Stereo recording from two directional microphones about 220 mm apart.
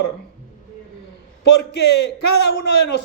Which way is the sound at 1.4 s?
50° left (ahead or behind).